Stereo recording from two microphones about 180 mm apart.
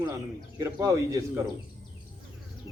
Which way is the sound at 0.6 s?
20° right (ahead or behind).